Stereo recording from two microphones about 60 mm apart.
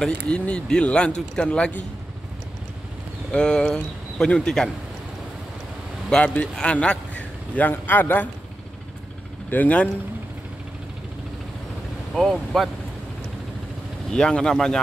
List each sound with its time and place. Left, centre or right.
0.0 s speech: centre
3.3 s speech: centre
6.0 s a man's voice: centre; by 8.3 s left
9.5 s speech: left
12.2 s speech: centre
14.1 s speech: centre